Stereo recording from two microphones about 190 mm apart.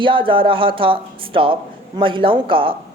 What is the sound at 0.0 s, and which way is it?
Speech, 25° right (ahead or behind).